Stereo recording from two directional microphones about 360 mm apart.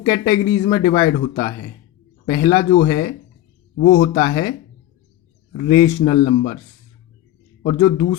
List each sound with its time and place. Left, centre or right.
0.0 s speech: centre
3.8 s speech: left
5.7 s speech: centre
6.2 s speech: left
7.6 s speech: centre